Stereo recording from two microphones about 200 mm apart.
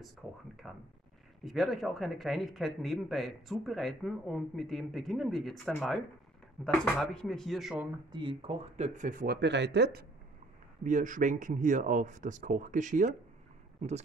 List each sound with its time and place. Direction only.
0.2 s speech: centre (ahead or behind)
8.1 s speech: 25° right (ahead or behind); by 10.0 s 55° right (ahead or behind)
10.8 s speech: 40° right (ahead or behind)